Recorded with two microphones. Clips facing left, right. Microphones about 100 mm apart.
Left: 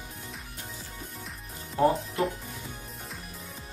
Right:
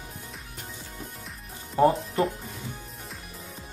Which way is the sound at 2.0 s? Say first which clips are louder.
Right 3 dB; centre (ahead or behind).